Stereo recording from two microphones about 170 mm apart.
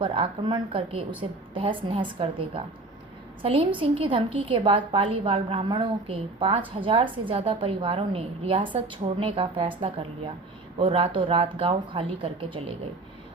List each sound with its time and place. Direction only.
0.0 s a woman's voice: 30° right (ahead or behind)